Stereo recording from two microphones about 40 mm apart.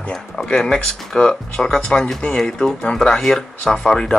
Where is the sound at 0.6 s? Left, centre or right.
Centre.